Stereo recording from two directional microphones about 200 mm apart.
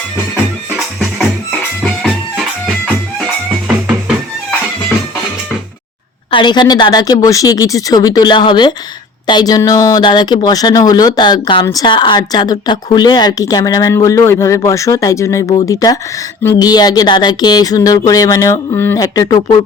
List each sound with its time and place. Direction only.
1.5 s music: 5° left (ahead or behind)
6.3 s speech: 20° left (ahead or behind)